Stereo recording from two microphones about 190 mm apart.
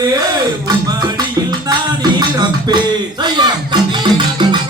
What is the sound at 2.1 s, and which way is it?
Music, 20° right (ahead or behind).